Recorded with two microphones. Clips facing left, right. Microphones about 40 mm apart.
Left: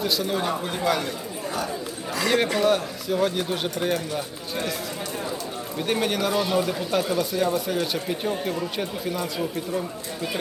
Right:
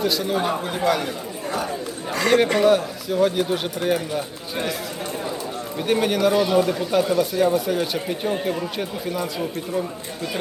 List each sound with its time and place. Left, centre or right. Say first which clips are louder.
0.0 s speech: right 3 dB; centre
2.1 s a man's voice: right 4 dB; right
2.6 s speech: right 4 dB; centre
5.8 s speech: right 5 dB; centre